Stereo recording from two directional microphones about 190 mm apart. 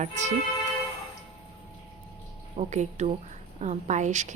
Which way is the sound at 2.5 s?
40° right (ahead or behind).